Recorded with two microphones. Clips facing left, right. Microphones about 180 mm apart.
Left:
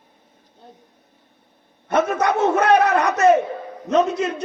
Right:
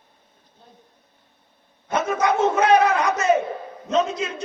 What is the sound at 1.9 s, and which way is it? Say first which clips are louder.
Speech: left 2 dB; 65° left (ahead or behind).